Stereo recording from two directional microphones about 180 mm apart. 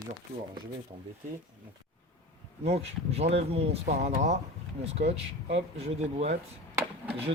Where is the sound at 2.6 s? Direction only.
35° right (ahead or behind).